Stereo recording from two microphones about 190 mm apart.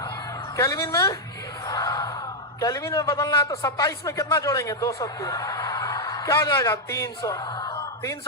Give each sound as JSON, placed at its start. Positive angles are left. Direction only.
{"t": 0.5, "sound": "a woman's voice", "side_deg": 15}
{"t": 1.6, "sound": "a sound", "side_deg": 15}
{"t": 2.6, "sound": "a man's voice", "side_deg": 15}